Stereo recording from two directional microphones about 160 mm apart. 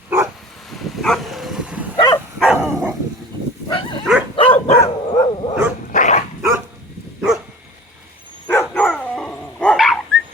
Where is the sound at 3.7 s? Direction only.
30° left (ahead or behind).